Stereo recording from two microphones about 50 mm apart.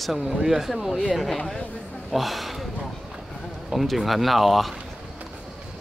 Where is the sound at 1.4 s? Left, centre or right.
Centre.